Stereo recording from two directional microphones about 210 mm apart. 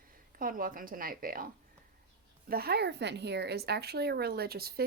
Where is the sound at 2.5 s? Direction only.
50° right (ahead or behind).